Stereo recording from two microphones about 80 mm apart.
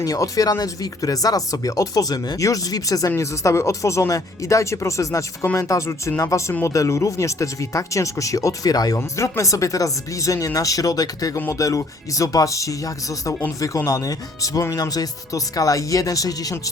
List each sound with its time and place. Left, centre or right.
0.0 s speech: left
9.0 s speech: left